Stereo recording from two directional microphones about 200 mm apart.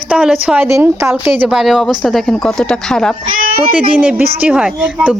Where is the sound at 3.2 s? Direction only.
45° right (ahead or behind).